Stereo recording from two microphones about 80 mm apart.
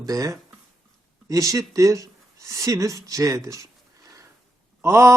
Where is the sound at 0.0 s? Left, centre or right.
Right.